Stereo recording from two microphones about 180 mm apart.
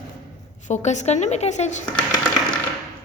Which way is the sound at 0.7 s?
40° left (ahead or behind).